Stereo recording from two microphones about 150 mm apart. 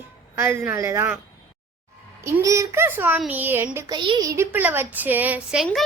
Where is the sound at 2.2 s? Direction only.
20° right (ahead or behind).